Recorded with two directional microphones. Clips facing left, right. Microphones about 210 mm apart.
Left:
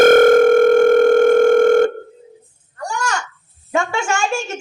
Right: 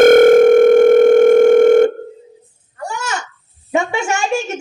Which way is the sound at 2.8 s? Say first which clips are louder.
Left 1 dB; 5° right (ahead or behind).